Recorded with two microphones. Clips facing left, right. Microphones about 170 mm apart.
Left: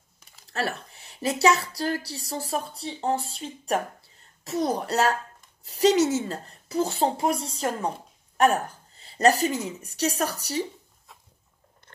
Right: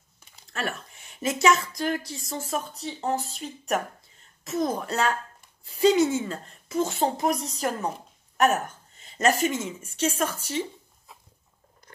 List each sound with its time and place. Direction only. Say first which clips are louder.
0.5 s a woman's voice: left 2 dB; 35° left (ahead or behind)